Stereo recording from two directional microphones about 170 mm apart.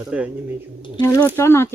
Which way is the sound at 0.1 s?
5° right (ahead or behind).